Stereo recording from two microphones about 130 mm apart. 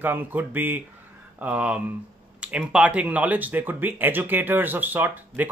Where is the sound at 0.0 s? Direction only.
15° right (ahead or behind).